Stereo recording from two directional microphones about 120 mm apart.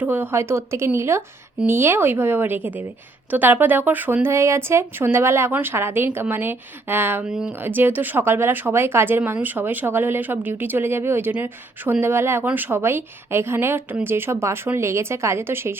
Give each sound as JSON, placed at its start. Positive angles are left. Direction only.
{"t": 0.0, "sound": "speech", "side_deg": -20}
{"t": 7.3, "sound": "speech", "side_deg": -5}
{"t": 7.6, "sound": "speech", "side_deg": -15}